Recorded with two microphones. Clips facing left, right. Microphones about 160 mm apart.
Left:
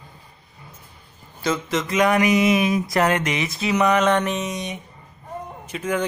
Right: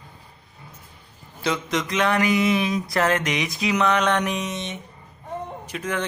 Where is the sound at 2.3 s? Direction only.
20° left (ahead or behind).